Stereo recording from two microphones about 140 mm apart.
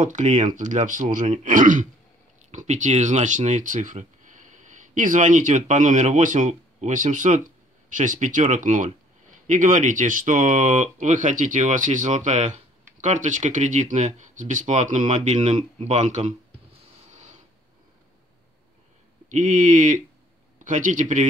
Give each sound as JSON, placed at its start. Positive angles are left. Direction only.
{"t": 0.0, "sound": "speech", "side_deg": -60}
{"t": 2.5, "sound": "speech", "side_deg": -55}
{"t": 17.1, "sound": "a sound", "side_deg": -55}
{"t": 19.3, "sound": "speech", "side_deg": -65}